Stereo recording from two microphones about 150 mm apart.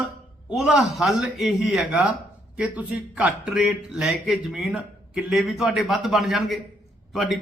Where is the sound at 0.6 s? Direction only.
5° right (ahead or behind).